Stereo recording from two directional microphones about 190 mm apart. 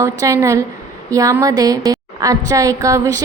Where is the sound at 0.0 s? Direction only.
15° right (ahead or behind).